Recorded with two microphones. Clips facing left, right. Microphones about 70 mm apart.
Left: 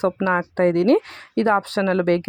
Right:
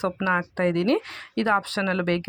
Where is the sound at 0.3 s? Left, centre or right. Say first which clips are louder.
Left 3 dB; left.